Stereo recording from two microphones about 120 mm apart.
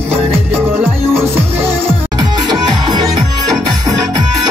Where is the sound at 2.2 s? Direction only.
35° right (ahead or behind).